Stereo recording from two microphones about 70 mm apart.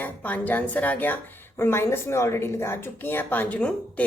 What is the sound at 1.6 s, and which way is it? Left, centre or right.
A woman's voice, left.